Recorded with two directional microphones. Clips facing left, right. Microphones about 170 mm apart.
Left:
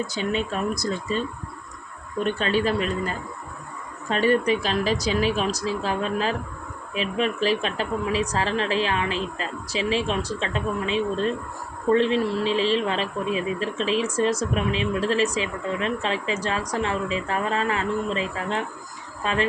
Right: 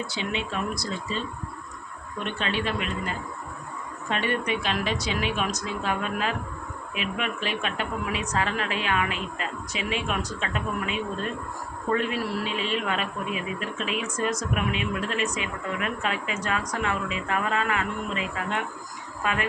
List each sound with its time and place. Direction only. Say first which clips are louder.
0.1 s a woman's voice: left 4 dB; 45° left (ahead or behind)